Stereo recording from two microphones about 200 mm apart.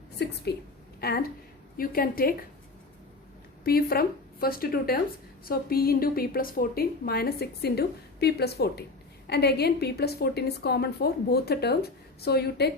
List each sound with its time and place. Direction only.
0.2 s a woman's voice: 55° left (ahead or behind)
3.6 s a woman's voice: 50° left (ahead or behind)